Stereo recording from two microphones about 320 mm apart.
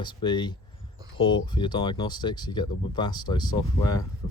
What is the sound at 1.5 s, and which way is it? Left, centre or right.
Speech, centre.